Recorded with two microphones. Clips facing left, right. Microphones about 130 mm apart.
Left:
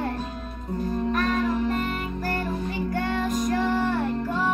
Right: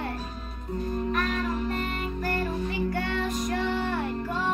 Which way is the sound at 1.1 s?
45° left (ahead or behind).